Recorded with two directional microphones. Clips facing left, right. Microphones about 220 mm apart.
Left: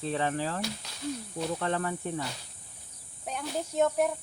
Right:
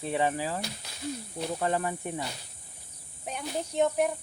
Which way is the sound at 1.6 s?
15° right (ahead or behind).